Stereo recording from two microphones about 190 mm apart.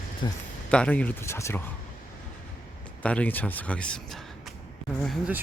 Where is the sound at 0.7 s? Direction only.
5° left (ahead or behind).